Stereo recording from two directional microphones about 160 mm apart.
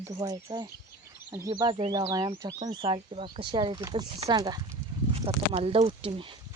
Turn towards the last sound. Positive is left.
turn(degrees=-35)  # may be behind; listen again after turning